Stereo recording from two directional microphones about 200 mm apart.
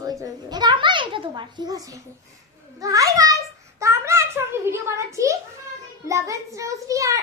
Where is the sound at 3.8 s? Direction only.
15° right (ahead or behind).